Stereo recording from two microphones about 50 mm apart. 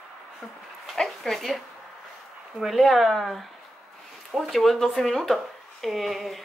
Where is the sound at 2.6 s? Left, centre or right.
Centre.